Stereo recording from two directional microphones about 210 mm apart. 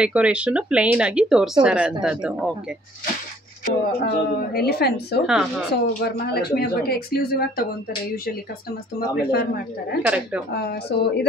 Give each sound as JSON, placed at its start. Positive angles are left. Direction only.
{"t": 0.0, "sound": "speech", "side_deg": -5}
{"t": 3.6, "sound": "a woman's voice", "side_deg": 50}
{"t": 5.2, "sound": "speech", "side_deg": -5}
{"t": 6.1, "sound": "a woman's voice", "side_deg": 50}
{"t": 9.1, "sound": "a woman's voice", "side_deg": 50}
{"t": 10.0, "sound": "speech", "side_deg": -5}
{"t": 10.5, "sound": "a woman's voice", "side_deg": 50}